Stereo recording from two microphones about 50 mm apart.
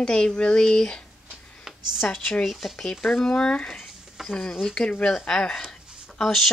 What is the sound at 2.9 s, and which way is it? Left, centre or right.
Speech, centre.